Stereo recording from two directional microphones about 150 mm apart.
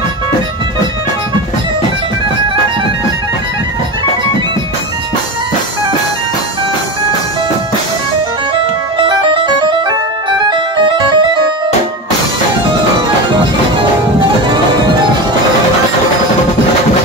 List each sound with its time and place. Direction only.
9.0 s music: 35° right (ahead or behind)